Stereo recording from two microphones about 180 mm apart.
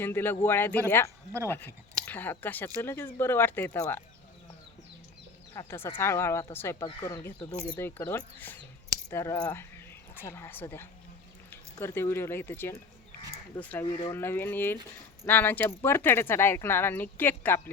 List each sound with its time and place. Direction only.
0.0 s speech: 10° left (ahead or behind)
5.5 s speech: 15° left (ahead or behind)